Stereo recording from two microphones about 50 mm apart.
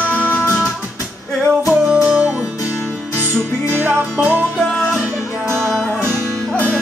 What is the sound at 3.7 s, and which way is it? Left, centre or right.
Music, right.